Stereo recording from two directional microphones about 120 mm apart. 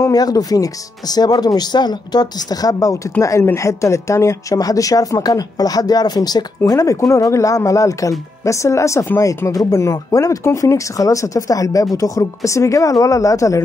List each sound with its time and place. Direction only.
0.0 s speech: 30° left (ahead or behind)